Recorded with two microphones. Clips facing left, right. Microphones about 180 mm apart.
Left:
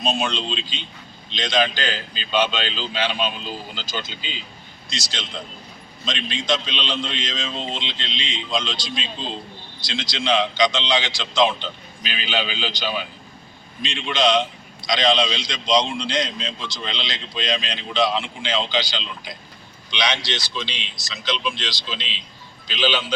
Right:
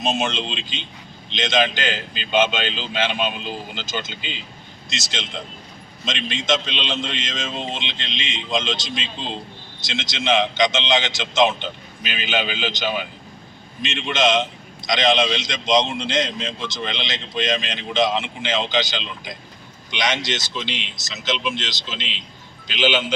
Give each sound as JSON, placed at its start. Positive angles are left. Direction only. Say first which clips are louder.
{"t": 0.0, "sound": "a man's voice", "louder": "right 1 dB", "side_deg": -20}
{"t": 9.9, "sound": "a man's voice", "louder": "right 1 dB", "side_deg": -20}
{"t": 20.5, "sound": "a man's voice", "louder": "right 2 dB", "side_deg": -20}
{"t": 22.8, "sound": "a man's voice", "louder": "right 2 dB", "side_deg": -20}